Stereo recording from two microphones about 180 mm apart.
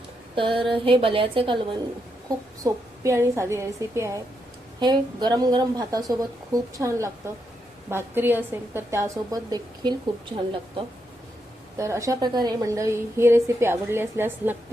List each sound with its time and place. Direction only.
0.3 s a woman's voice: 30° right (ahead or behind)
2.6 s a woman's voice: 15° right (ahead or behind)